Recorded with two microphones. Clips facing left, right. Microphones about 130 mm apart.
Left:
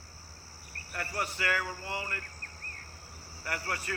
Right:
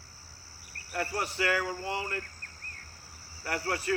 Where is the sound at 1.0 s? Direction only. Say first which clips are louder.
Right 4 dB; 25° right (ahead or behind).